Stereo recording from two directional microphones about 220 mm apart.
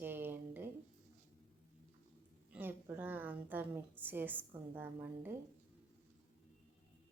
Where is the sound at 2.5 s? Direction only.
10° right (ahead or behind).